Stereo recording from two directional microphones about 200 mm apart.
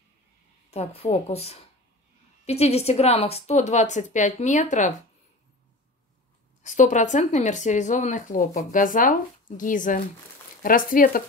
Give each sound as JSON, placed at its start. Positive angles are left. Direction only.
{"t": 0.7, "sound": "a woman's voice", "side_deg": 30}
{"t": 6.6, "sound": "a woman's voice", "side_deg": 40}